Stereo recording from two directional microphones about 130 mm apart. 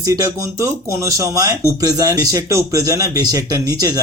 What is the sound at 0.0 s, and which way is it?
A man's voice, 25° right (ahead or behind).